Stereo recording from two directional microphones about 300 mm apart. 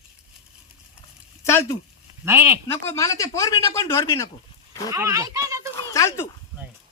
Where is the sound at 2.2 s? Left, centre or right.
Centre.